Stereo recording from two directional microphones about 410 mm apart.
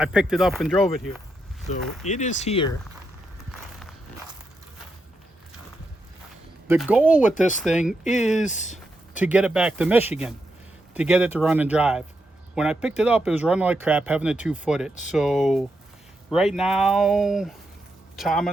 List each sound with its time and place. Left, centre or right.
0.0 s speech: centre
1.7 s speech: centre
6.7 s speech: centre
8.4 s speech: centre
9.1 s speech: centre